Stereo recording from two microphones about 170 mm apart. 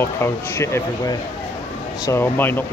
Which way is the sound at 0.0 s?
15° left (ahead or behind).